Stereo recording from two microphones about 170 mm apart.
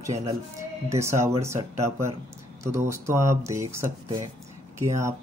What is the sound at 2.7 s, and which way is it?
Speech, 15° right (ahead or behind).